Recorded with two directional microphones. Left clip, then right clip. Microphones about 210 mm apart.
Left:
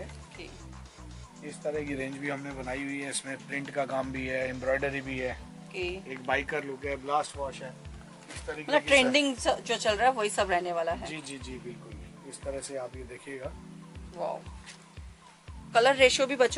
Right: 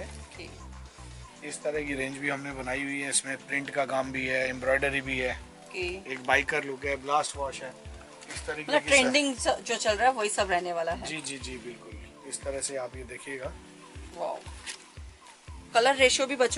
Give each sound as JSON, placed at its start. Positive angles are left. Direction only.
{"t": 1.4, "sound": "speech", "side_deg": 10}
{"t": 8.5, "sound": "speech", "side_deg": 10}
{"t": 15.7, "sound": "speech", "side_deg": 5}